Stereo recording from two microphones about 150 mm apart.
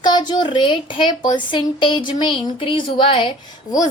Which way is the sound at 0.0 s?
30° left (ahead or behind).